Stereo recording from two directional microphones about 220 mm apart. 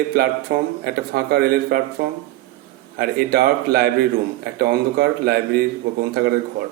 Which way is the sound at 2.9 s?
45° right (ahead or behind).